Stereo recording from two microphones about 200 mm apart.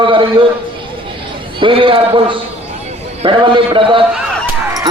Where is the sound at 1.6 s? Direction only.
25° right (ahead or behind).